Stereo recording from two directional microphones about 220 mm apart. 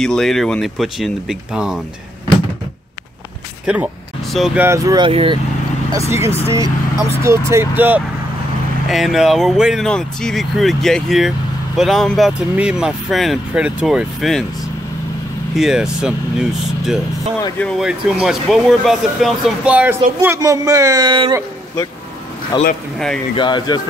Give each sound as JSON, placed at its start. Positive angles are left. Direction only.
{"t": 0.0, "sound": "speech", "side_deg": 0}
{"t": 3.6, "sound": "speech", "side_deg": -5}
{"t": 4.6, "sound": "speech", "side_deg": -15}
{"t": 15.5, "sound": "speech", "side_deg": 0}
{"t": 22.5, "sound": "speech", "side_deg": 20}